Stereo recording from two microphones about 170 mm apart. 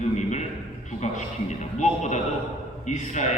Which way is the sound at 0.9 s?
45° left (ahead or behind).